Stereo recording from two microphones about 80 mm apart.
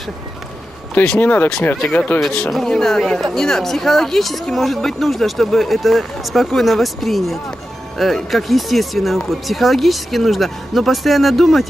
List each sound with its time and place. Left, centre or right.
0.9 s speech: centre
2.5 s speech: centre